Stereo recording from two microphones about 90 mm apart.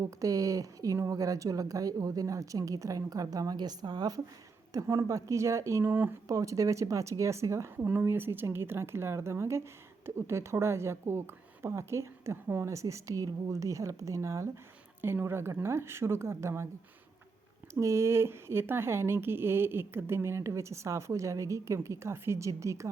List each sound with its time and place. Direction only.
0.0 s speech: 40° right (ahead or behind); by 6.1 s 25° right (ahead or behind)
6.2 s speech: 35° right (ahead or behind)
17.7 s speech: 35° right (ahead or behind)